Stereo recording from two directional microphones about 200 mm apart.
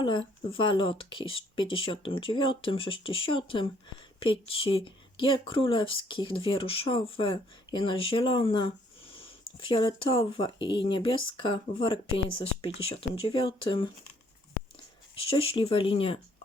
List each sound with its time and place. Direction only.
0.0 s speech: 25° left (ahead or behind)
15.1 s speech: 25° left (ahead or behind)